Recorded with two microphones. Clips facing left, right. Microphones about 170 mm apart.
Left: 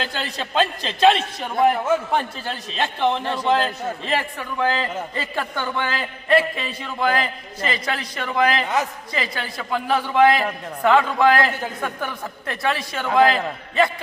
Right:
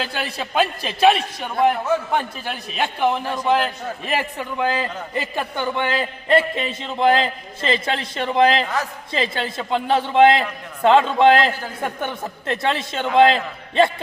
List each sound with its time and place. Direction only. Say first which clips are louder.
0.0 s a man's voice: right 1 dB; 15° right (ahead or behind)
1.4 s a man's voice: even; centre (ahead or behind); by 13.9 s 25° right (ahead or behind)